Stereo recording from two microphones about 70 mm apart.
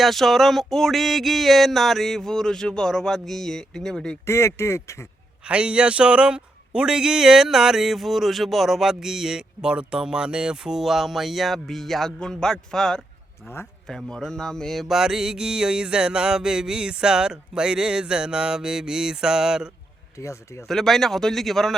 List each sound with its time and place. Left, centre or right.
0.0 s a sound: centre
4.3 s speech: left
5.5 s a man's voice: centre
14.9 s a man's voice: centre
20.1 s speech: left
20.7 s a sound: centre